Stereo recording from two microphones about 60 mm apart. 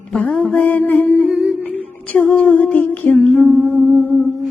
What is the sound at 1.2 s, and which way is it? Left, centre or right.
Music, centre.